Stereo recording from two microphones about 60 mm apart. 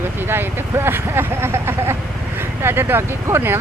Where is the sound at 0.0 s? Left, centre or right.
Right.